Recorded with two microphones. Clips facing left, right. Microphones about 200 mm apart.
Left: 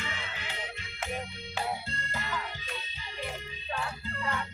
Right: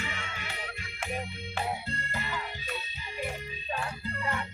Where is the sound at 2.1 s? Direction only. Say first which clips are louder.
Left 2 dB; 15° right (ahead or behind).